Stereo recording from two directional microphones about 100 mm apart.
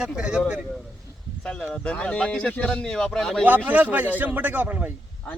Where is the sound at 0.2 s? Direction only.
10° right (ahead or behind).